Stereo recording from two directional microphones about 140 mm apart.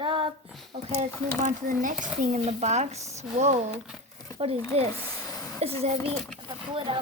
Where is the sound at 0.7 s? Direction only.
50° right (ahead or behind).